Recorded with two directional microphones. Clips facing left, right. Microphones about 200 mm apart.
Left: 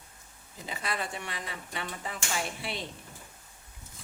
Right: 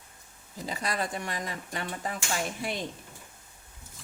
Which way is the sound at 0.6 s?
40° right (ahead or behind).